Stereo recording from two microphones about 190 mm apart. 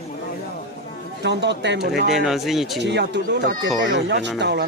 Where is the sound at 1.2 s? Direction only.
65° right (ahead or behind).